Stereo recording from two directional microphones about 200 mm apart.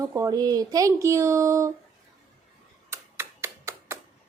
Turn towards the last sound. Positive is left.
turn(degrees=-15)  # may be behind; listen again after turning